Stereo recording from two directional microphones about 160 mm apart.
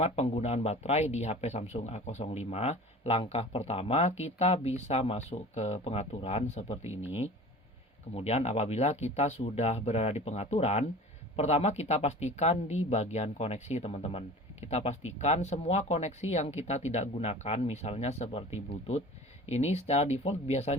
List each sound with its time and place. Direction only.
0.0 s speech: 40° left (ahead or behind)
8.1 s speech: 40° left (ahead or behind)